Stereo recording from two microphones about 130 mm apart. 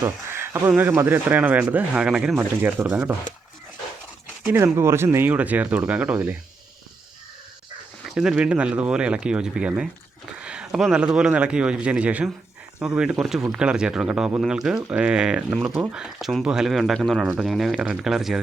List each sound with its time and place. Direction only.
0.0 s a sound: 20° right (ahead or behind)
0.8 s speech: 15° right (ahead or behind)
4.5 s speech: 20° right (ahead or behind)
8.0 s speech: 5° right (ahead or behind)